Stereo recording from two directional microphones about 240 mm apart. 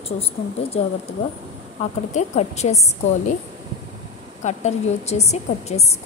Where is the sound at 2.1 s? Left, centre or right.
Left.